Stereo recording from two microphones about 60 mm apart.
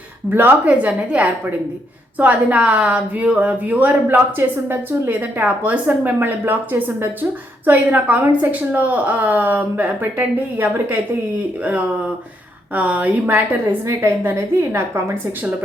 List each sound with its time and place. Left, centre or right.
0.3 s a woman's voice: right
12.7 s speech: right
14.3 s a woman's voice: right